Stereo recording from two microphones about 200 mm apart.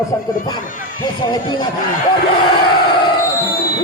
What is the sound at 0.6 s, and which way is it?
Speech, 45° left (ahead or behind).